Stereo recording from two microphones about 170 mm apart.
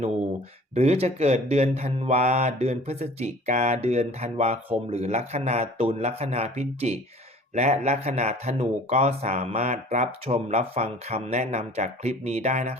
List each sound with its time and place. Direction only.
0.7 s speech: 40° right (ahead or behind)